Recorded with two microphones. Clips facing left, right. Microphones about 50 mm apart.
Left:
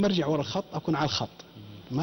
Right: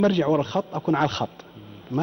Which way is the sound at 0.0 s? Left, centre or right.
Right.